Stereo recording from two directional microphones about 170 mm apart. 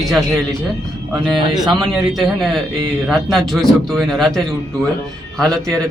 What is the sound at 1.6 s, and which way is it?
Speech, 25° right (ahead or behind).